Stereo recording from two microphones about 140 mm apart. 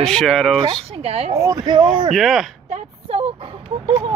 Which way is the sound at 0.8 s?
45° right (ahead or behind).